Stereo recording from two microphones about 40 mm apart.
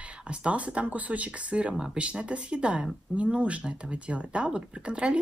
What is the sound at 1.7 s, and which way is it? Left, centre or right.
Speech, right.